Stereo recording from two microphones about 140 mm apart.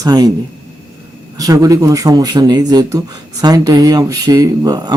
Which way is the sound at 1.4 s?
25° right (ahead or behind).